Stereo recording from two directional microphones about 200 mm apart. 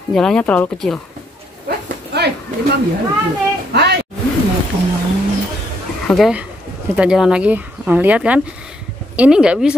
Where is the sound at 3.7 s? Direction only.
55° right (ahead or behind).